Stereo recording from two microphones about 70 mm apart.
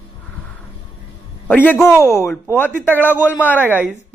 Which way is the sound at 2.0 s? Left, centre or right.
Left.